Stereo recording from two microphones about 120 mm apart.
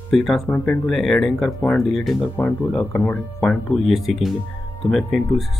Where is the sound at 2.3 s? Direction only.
15° left (ahead or behind).